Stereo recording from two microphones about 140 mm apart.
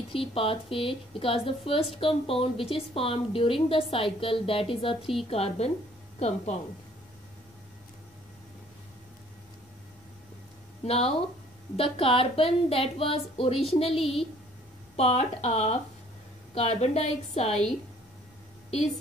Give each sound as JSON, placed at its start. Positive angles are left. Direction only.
{"t": 0.1, "sound": "a woman's voice", "side_deg": 40}
{"t": 10.8, "sound": "speech", "side_deg": 45}
{"t": 13.9, "sound": "a woman's voice", "side_deg": 0}
{"t": 15.0, "sound": "speech", "side_deg": 45}